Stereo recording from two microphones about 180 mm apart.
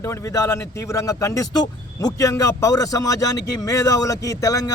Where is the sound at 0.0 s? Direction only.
15° left (ahead or behind).